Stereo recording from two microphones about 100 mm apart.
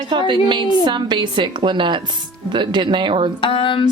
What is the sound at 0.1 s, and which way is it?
A woman's voice, 50° right (ahead or behind).